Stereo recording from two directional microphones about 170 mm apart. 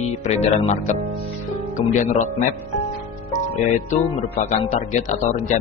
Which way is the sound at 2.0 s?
45° left (ahead or behind).